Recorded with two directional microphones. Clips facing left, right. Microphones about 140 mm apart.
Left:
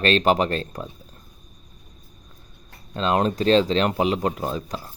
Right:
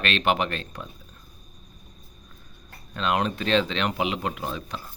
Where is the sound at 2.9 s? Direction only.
30° left (ahead or behind).